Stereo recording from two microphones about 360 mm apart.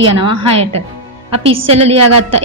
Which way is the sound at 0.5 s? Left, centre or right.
Centre.